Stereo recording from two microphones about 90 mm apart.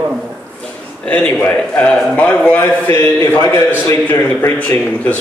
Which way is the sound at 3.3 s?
30° left (ahead or behind).